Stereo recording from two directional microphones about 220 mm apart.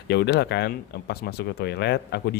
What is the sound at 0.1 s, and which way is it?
Speech, 50° left (ahead or behind).